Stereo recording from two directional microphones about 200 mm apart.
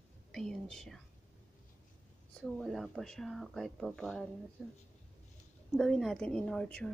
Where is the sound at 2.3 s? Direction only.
5° left (ahead or behind).